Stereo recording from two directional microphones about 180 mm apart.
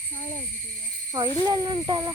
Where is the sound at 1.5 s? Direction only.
20° right (ahead or behind).